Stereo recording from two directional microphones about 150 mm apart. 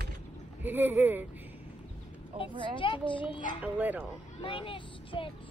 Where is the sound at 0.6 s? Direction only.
10° right (ahead or behind).